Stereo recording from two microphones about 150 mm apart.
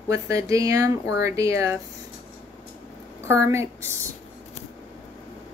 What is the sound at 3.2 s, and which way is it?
Speech, 20° right (ahead or behind).